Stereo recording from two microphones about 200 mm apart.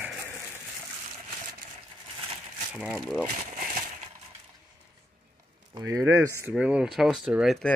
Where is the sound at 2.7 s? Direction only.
5° right (ahead or behind).